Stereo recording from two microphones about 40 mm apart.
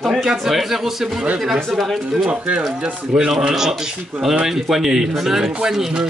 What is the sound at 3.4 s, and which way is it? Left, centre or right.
Speech, centre.